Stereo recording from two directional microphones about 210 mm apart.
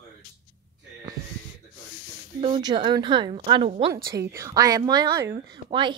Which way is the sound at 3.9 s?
15° right (ahead or behind).